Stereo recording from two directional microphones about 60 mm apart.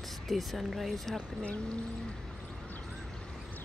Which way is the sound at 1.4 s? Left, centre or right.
Left.